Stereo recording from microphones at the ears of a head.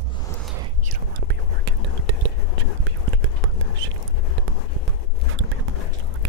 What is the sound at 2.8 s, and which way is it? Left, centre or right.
Whispering, right.